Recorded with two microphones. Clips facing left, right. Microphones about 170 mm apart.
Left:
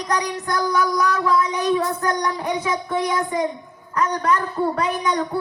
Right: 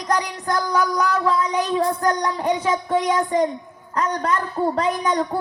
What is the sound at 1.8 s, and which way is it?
A woman's voice, 30° right (ahead or behind).